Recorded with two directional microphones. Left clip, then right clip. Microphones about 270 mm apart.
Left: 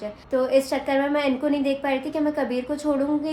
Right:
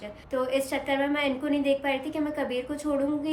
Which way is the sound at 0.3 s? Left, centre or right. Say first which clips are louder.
Left 6 dB; left.